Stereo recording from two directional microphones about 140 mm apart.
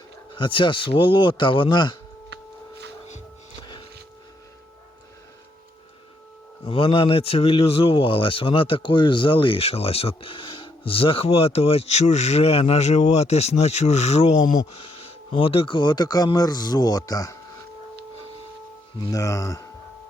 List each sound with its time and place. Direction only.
0.3 s speech: 35° left (ahead or behind)
6.7 s speech: 40° left (ahead or behind); by 14.6 s 60° left (ahead or behind)
14.7 s speech: 45° left (ahead or behind); by 17.3 s 25° left (ahead or behind)
18.9 s speech: 25° left (ahead or behind)